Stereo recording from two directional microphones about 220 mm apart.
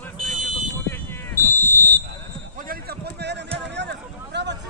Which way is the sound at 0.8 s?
10° left (ahead or behind).